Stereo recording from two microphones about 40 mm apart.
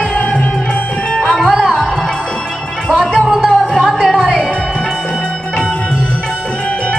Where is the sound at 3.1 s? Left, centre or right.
Centre.